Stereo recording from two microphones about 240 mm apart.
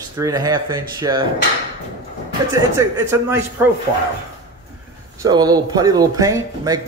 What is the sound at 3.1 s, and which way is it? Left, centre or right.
Speech, centre.